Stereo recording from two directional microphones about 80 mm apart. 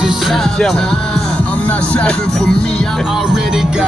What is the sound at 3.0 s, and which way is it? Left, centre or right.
Music, centre.